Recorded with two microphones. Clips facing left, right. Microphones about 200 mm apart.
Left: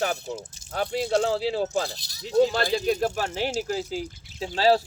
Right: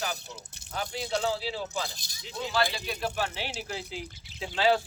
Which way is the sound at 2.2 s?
40° left (ahead or behind).